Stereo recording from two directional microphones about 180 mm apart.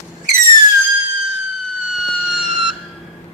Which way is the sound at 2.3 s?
Centre (ahead or behind).